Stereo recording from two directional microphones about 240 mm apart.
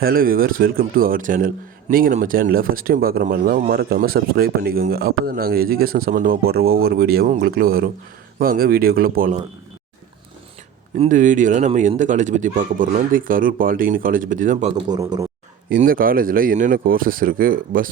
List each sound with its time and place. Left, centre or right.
0.0 s speech: right
10.9 s speech: right
14.8 s speech: centre
15.7 s speech: right